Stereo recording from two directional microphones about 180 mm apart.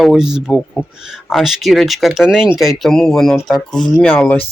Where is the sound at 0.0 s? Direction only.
Centre (ahead or behind).